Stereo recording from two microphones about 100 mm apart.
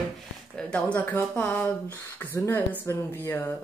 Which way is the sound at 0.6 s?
10° left (ahead or behind).